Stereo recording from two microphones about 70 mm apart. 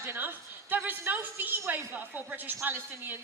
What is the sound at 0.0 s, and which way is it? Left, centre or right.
A woman's voice, right.